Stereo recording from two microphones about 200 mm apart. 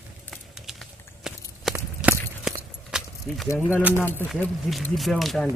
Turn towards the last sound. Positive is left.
turn(degrees=0)  # may be behind; listen again after turning